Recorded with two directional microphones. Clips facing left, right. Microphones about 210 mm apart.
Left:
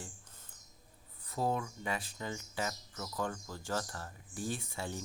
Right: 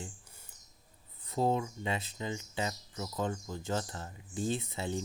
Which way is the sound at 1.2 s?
25° right (ahead or behind).